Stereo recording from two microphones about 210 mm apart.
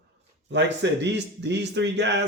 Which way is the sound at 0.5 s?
55° right (ahead or behind).